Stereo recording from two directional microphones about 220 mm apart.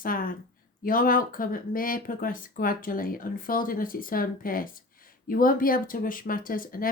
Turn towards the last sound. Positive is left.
turn(degrees=40)  # may be behind; listen again after turning